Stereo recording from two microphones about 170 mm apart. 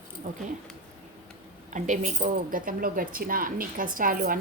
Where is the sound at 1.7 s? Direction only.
45° right (ahead or behind).